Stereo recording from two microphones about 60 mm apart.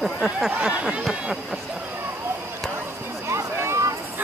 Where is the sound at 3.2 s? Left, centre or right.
Right.